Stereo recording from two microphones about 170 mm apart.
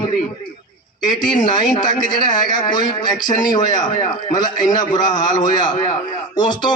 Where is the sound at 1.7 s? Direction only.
25° left (ahead or behind).